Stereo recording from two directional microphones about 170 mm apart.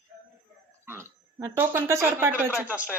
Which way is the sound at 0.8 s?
15° right (ahead or behind).